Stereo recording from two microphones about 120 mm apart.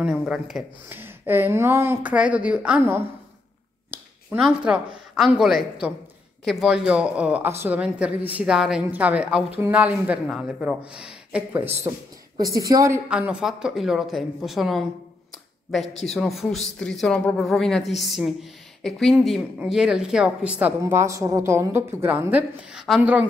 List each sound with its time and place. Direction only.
0.0 s speech: 5° right (ahead or behind)
0.8 s a woman's voice: 15° right (ahead or behind)
4.4 s a woman's voice: 5° right (ahead or behind)
10.3 s a woman's voice: centre (ahead or behind); by 11.9 s 15° right (ahead or behind)
12.4 s a woman's voice: 30° right (ahead or behind)
13.1 s speech: 10° right (ahead or behind)
16.1 s a woman's voice: centre (ahead or behind)
20.8 s a woman's voice: 25° right (ahead or behind); by 23.2 s 10° right (ahead or behind)